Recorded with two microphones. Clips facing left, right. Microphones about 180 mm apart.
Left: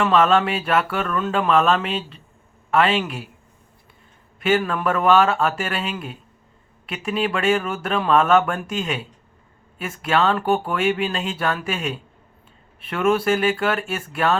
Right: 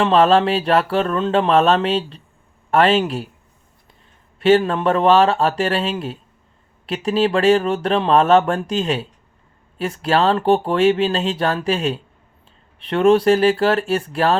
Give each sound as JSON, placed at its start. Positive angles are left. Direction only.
{"t": 0.0, "sound": "a man's voice", "side_deg": -30}
{"t": 4.4, "sound": "speech", "side_deg": -35}